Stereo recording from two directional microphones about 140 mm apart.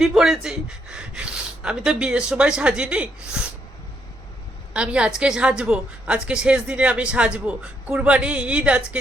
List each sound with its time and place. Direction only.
0.0 s a woman's voice: 5° right (ahead or behind)
4.7 s a woman's voice: 5° right (ahead or behind)